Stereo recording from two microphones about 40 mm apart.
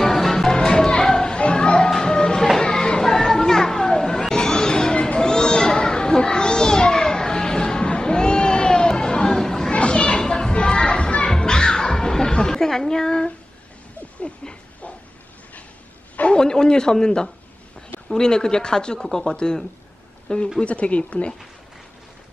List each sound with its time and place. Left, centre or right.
0.0 s music: centre
2.6 s children playing: centre
9.7 s children playing: left
11.3 s music: centre
16.3 s a sound: centre
18.1 s speech: centre
18.9 s speech: centre; by 21.3 s left